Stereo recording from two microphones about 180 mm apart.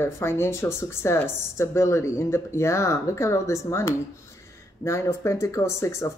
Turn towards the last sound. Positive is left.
turn(degrees=15)  # may be behind; listen again after turning